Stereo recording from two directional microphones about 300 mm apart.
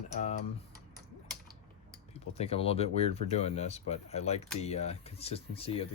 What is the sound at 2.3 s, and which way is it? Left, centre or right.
Speech, centre.